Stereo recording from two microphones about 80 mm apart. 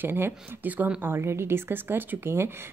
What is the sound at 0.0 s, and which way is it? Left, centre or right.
A woman's voice, right.